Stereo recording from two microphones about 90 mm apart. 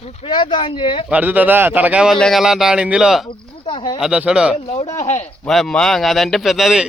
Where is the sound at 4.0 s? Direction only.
10° right (ahead or behind).